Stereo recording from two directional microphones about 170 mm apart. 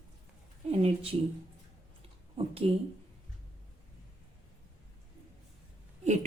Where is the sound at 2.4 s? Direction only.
35° right (ahead or behind).